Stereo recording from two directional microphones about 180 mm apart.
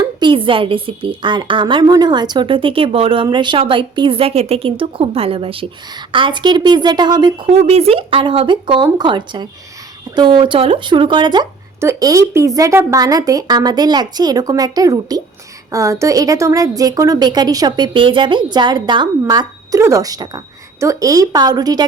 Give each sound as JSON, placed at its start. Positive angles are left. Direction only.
{"t": 0.2, "sound": "a woman's voice", "side_deg": -30}